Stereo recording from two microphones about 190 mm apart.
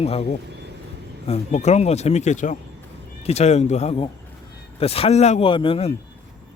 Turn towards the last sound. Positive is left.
turn(degrees=30)  # may be behind; listen again after turning